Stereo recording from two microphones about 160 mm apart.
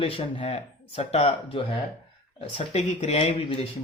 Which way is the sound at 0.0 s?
35° left (ahead or behind).